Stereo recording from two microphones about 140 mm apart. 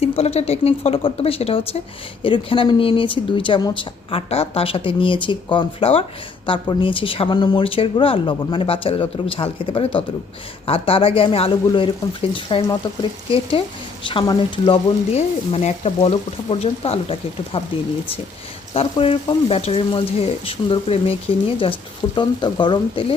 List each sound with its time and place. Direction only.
0.0 s speech: 45° left (ahead or behind); by 3.8 s 30° left (ahead or behind)
4.1 s speech: 45° left (ahead or behind)
18.7 s speech: 45° left (ahead or behind)